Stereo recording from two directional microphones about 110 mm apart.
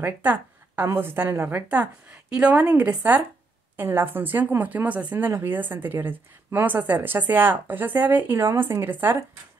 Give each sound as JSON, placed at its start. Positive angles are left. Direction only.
{"t": 0.0, "sound": "a woman's voice", "side_deg": -15}